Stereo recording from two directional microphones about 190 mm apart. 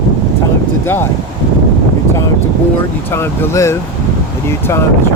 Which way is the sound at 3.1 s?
15° left (ahead or behind).